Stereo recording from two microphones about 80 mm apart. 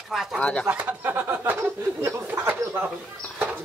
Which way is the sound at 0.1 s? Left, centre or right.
Centre.